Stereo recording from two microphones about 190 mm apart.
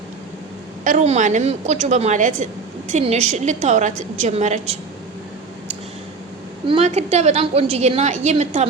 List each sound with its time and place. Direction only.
0.9 s a woman's voice: 40° right (ahead or behind)
6.7 s a woman's voice: 35° right (ahead or behind)